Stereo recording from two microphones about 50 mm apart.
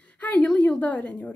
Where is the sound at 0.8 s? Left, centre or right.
Left.